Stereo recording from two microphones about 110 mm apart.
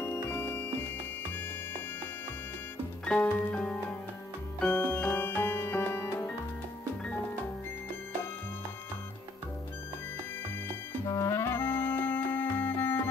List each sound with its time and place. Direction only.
0.0 s music: 20° left (ahead or behind)
3.1 s music: 10° left (ahead or behind)
11.1 s music: 25° left (ahead or behind)